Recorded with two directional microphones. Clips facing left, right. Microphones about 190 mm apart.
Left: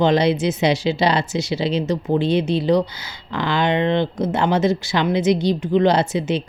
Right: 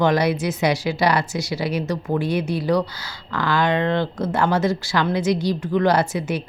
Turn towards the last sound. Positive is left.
turn(degrees=25)  # may be behind; listen again after turning